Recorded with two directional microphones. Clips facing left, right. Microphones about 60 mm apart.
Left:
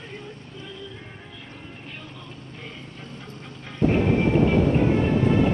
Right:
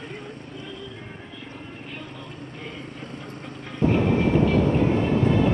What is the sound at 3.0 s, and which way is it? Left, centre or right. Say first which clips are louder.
Vehicle: right 3 dB; right.